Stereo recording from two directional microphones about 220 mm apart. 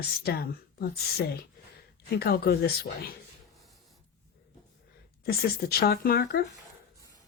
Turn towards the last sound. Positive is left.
turn(degrees=45)  # may be behind; listen again after turning